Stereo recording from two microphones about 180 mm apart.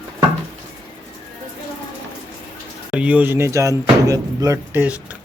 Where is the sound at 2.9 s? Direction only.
5° right (ahead or behind).